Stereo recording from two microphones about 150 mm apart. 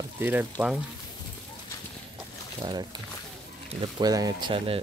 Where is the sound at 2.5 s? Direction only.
30° right (ahead or behind).